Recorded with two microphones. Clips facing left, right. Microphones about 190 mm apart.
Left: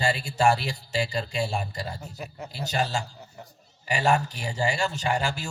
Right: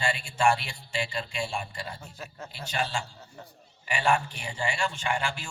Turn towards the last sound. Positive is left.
turn(degrees=40)  # may be behind; listen again after turning